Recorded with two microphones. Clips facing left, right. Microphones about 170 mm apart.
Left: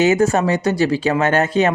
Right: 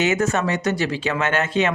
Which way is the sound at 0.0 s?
35° left (ahead or behind).